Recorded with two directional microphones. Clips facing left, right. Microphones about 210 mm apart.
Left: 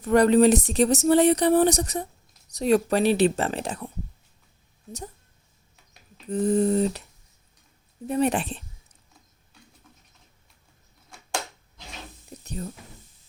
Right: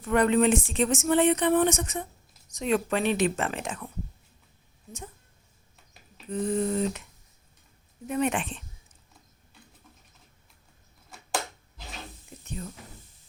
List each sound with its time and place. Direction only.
0.0 s speech: 40° left (ahead or behind)
6.3 s speech: 40° left (ahead or behind)
12.3 s a sound: 40° left (ahead or behind)